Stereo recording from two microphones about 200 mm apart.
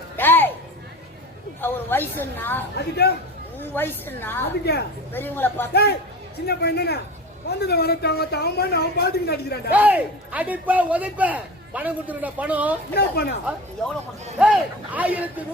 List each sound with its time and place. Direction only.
0.2 s a sound: 10° left (ahead or behind)
1.6 s a woman's voice: 10° left (ahead or behind)
2.7 s a woman's voice: 55° left (ahead or behind)
3.6 s speech: 10° left (ahead or behind)
4.6 s a woman's voice: 55° left (ahead or behind)
5.1 s speech: 10° left (ahead or behind)
5.7 s a woman's voice: 55° left (ahead or behind)
9.7 s a man's voice: 10° right (ahead or behind)
12.9 s a woman's voice: 55° left (ahead or behind)
14.3 s a man's voice: 5° right (ahead or behind)